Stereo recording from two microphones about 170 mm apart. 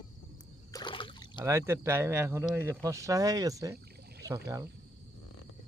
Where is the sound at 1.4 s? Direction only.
15° right (ahead or behind).